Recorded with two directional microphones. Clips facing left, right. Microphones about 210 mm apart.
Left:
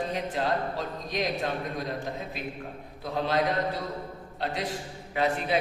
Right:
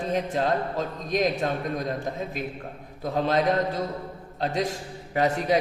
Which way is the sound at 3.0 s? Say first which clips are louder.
Right 4 dB; 45° right (ahead or behind).